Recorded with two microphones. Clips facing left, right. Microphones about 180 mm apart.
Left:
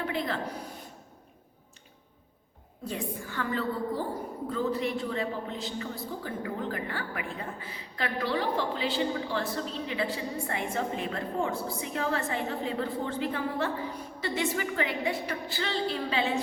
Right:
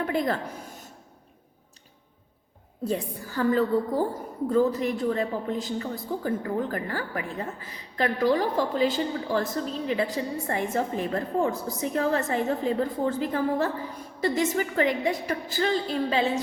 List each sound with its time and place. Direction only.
0.0 s a woman's voice: 45° right (ahead or behind)
2.8 s a woman's voice: 35° right (ahead or behind)